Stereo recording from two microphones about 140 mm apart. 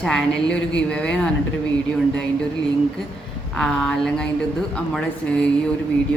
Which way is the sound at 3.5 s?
5° left (ahead or behind).